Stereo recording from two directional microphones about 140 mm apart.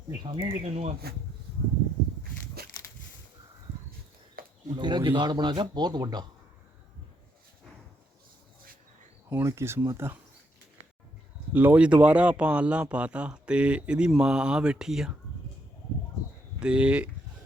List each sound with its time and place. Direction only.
0.2 s speech: 30° right (ahead or behind)
0.6 s speech: 50° right (ahead or behind)
2.6 s a sound: 90° right
4.4 s a sound: 90° right
4.8 s speech: 35° right (ahead or behind)
9.3 s speech: 20° right (ahead or behind)
11.5 s speech: 10° right (ahead or behind)
16.6 s speech: 5° right (ahead or behind)